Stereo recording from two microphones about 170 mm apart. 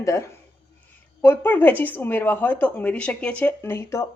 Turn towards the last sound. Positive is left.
turn(degrees=15)  # may be behind; listen again after turning